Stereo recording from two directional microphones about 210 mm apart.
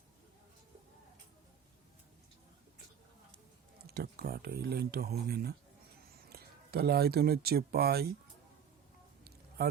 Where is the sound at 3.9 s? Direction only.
50° right (ahead or behind).